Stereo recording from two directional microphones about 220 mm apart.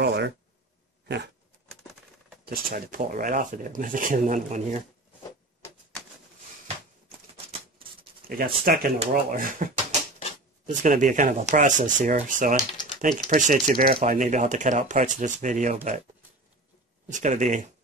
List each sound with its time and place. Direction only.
0.0 s a sound: 50° right (ahead or behind)
1.0 s dog: 50° right (ahead or behind)
2.4 s speech: 45° right (ahead or behind)
8.3 s speech: 40° right (ahead or behind)
17.1 s speech: 35° right (ahead or behind)